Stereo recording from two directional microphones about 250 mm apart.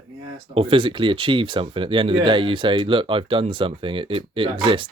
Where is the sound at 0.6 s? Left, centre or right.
Centre.